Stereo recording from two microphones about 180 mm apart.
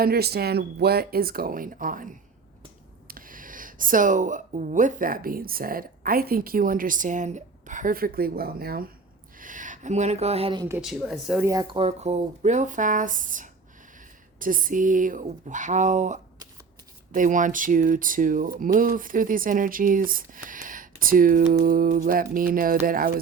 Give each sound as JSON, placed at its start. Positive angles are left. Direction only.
{"t": 0.0, "sound": "speech", "side_deg": -60}
{"t": 10.7, "sound": "speech", "side_deg": -5}
{"t": 11.4, "sound": "speech", "side_deg": -20}
{"t": 11.8, "sound": "speech", "side_deg": -40}